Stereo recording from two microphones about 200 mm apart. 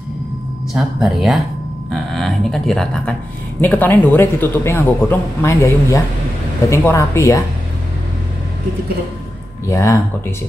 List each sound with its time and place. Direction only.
0.7 s a man's voice: centre (ahead or behind); by 7.4 s 15° left (ahead or behind)
9.7 s a man's voice: 15° left (ahead or behind)